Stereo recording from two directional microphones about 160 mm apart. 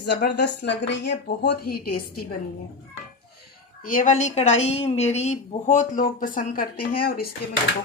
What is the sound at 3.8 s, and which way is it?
A woman's voice, 55° left (ahead or behind).